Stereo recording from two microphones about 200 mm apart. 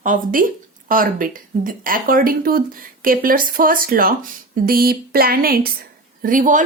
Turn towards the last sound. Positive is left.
turn(degrees=-40)  # may be behind; listen again after turning